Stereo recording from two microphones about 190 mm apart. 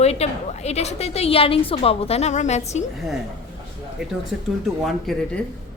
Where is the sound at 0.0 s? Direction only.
35° left (ahead or behind).